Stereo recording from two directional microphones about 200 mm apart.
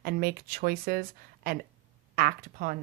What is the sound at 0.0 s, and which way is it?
A woman's voice, 50° right (ahead or behind).